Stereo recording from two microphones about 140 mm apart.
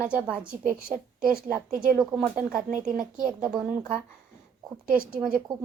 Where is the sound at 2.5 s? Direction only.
75° right (ahead or behind).